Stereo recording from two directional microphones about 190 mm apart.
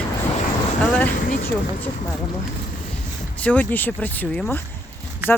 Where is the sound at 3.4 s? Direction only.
10° left (ahead or behind).